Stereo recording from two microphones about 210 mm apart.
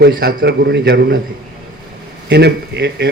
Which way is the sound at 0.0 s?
45° right (ahead or behind).